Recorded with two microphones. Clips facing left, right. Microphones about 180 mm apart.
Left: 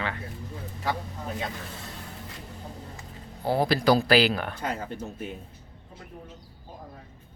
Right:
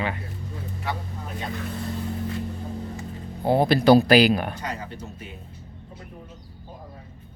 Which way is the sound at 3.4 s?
20° right (ahead or behind).